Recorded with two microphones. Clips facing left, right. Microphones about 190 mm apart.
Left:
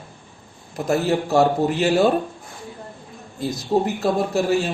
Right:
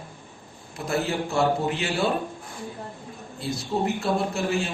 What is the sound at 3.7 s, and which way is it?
Speech, 35° left (ahead or behind).